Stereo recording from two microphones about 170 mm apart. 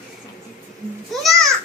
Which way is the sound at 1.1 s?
Centre (ahead or behind).